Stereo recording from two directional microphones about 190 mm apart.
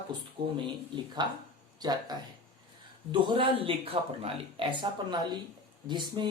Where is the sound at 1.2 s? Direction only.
20° right (ahead or behind).